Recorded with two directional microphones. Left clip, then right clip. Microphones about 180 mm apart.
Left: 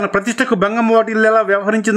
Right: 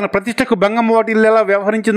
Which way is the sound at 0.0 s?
25° right (ahead or behind).